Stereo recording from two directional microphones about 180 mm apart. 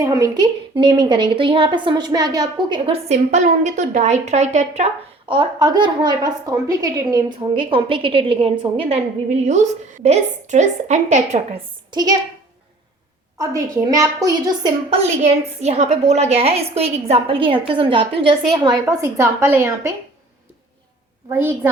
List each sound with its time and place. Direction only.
0.0 s a woman's voice: 20° right (ahead or behind); by 4.9 s 40° right (ahead or behind)
5.3 s a woman's voice: 25° right (ahead or behind)
11.9 s a child's voice: 20° right (ahead or behind)
13.4 s a woman's voice: 15° right (ahead or behind)
14.8 s a woman's voice: 35° right (ahead or behind); by 19.9 s 15° right (ahead or behind)
21.2 s a woman's voice: 10° right (ahead or behind)